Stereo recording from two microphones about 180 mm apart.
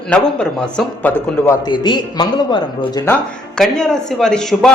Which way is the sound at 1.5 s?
25° left (ahead or behind).